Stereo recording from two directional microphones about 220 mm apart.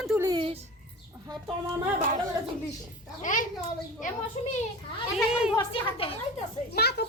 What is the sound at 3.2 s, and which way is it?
Speech, 35° left (ahead or behind).